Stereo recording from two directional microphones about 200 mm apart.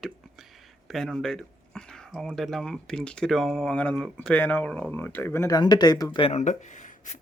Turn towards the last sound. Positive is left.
turn(degrees=40)  # may be behind; listen again after turning